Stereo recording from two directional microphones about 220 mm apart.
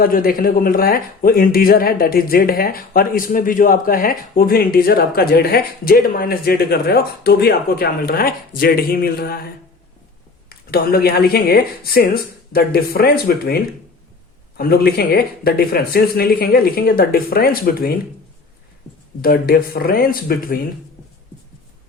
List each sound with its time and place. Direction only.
0.0 s speech: 40° left (ahead or behind)
10.5 s speech: 45° left (ahead or behind)
14.6 s speech: 45° left (ahead or behind)
19.2 s speech: 40° left (ahead or behind)